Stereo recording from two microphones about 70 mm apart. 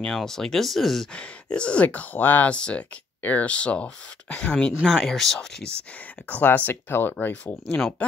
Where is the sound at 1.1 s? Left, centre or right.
Centre.